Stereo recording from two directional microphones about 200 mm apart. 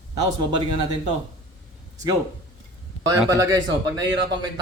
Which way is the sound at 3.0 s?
15° right (ahead or behind).